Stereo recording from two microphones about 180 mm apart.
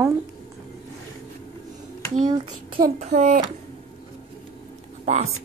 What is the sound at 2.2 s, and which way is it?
Speech, 25° right (ahead or behind).